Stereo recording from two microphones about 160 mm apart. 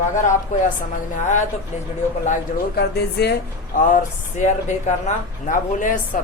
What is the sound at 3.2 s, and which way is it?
Speech, 90° left.